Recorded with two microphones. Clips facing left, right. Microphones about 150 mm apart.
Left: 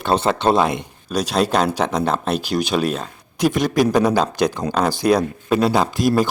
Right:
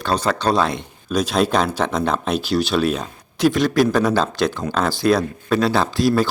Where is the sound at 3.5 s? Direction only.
15° left (ahead or behind).